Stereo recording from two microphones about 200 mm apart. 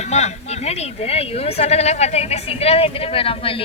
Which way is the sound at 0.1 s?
35° left (ahead or behind).